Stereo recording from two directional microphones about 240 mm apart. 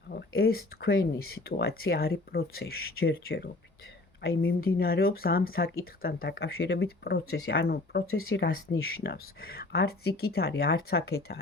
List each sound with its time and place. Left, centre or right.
0.1 s speech: left